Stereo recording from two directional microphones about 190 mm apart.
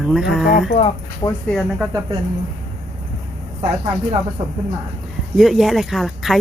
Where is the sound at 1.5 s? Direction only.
Centre (ahead or behind).